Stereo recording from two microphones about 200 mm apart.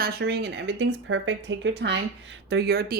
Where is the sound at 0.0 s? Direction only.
50° right (ahead or behind).